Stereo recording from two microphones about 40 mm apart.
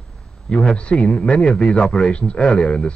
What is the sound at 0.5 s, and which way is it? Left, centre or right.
A man's voice, left.